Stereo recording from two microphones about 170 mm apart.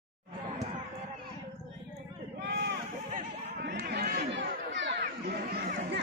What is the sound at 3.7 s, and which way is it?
Run, 70° right (ahead or behind).